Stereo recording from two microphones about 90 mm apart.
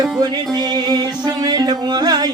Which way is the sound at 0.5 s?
50° right (ahead or behind).